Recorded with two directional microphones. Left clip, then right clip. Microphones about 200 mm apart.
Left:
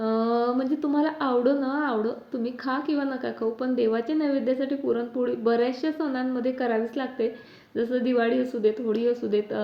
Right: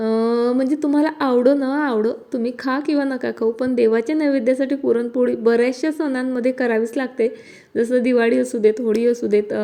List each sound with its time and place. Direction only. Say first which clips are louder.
0.0 s speech: right 6 dB; 45° right (ahead or behind)